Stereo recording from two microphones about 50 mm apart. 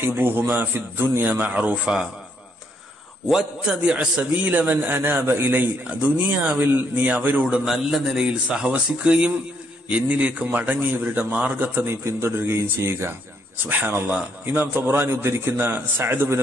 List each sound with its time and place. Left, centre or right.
0.0 s a man's voice: right
3.3 s a man's voice: centre; by 4.9 s right
4.9 s a man's voice: right
5.9 s a man's voice: right
7.6 s a man's voice: centre
8.3 s a man's voice: right
11.9 s a man's voice: right
13.7 s a man's voice: right